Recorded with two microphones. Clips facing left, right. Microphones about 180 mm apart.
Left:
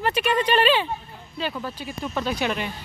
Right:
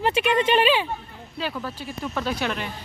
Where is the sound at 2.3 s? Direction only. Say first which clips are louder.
Left 2 dB; 10° left (ahead or behind).